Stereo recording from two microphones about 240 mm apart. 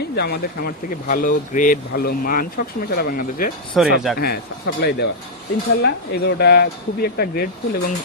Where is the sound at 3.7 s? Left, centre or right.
Centre.